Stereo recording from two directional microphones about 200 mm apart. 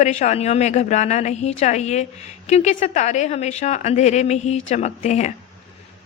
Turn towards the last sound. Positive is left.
turn(degrees=35)  # may be behind; listen again after turning